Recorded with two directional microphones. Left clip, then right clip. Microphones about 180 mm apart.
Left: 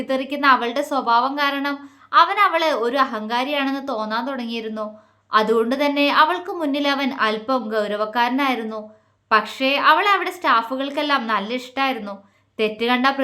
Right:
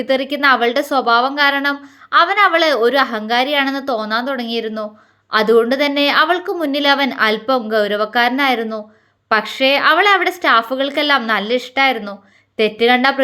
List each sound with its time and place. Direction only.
0.0 s a woman's voice: 20° right (ahead or behind)